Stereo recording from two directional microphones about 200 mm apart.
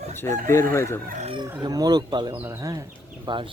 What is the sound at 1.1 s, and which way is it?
Speech, 35° right (ahead or behind).